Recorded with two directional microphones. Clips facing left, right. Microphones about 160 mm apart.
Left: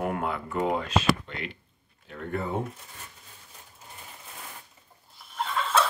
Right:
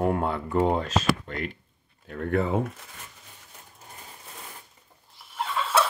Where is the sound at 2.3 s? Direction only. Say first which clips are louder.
Right 6 dB; 90° right.